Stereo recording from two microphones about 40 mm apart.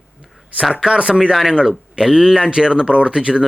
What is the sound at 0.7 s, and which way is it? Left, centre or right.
Speech, right.